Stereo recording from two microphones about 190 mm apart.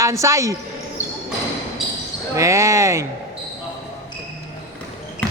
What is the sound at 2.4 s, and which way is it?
Speech, 15° right (ahead or behind).